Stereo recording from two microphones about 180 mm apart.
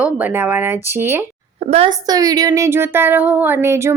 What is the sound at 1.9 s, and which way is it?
A woman's voice, 20° right (ahead or behind).